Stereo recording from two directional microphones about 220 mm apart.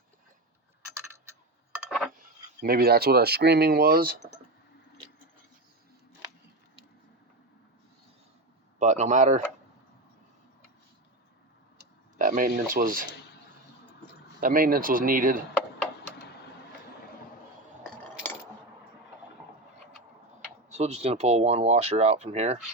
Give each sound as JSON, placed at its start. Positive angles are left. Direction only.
{"t": 1.1, "sound": "a sound", "side_deg": -10}
{"t": 2.6, "sound": "speech", "side_deg": -45}
{"t": 8.8, "sound": "speech", "side_deg": -35}
{"t": 12.1, "sound": "speech", "side_deg": -40}
{"t": 14.4, "sound": "speech", "side_deg": -40}
{"t": 20.7, "sound": "speech", "side_deg": -30}